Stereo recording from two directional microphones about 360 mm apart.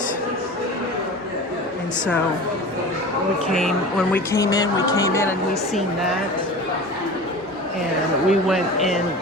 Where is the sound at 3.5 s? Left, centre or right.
Centre.